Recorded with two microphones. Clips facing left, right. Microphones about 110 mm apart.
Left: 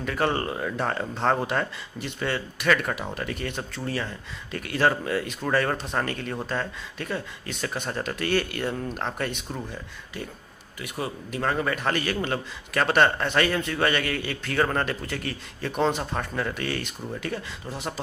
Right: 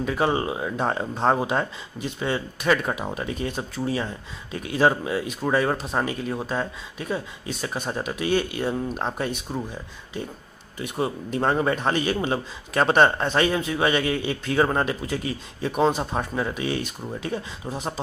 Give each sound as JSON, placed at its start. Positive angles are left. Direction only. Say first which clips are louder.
{"t": 0.0, "sound": "speech", "louder": "right 3 dB", "side_deg": -15}
{"t": 10.8, "sound": "speech", "louder": "right 5 dB", "side_deg": -25}